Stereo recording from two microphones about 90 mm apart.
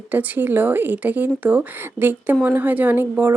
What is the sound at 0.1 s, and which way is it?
Speech, 20° right (ahead or behind).